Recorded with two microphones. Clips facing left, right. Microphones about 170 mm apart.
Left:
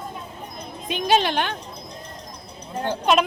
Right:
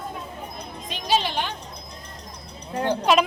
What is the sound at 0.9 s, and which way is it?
Speech, 55° left (ahead or behind).